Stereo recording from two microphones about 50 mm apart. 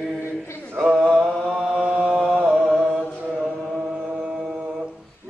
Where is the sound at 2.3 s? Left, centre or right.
Right.